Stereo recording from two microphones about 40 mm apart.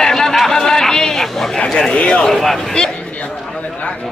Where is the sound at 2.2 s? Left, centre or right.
Centre.